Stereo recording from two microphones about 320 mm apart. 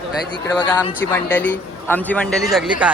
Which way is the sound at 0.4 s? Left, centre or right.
Centre.